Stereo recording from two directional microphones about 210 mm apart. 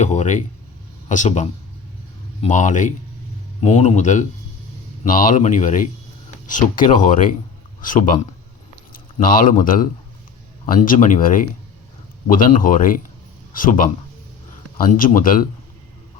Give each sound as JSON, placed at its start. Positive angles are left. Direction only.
{"t": 0.0, "sound": "speech", "side_deg": 35}